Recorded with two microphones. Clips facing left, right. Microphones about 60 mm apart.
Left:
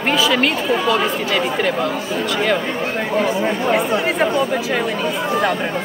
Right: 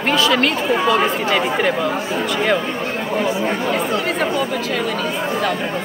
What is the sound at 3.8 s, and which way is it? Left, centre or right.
Speech, centre.